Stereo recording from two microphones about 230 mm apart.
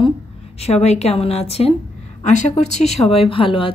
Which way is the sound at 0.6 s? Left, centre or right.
Left.